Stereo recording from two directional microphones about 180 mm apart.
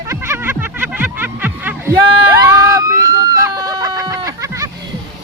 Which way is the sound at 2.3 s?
15° right (ahead or behind).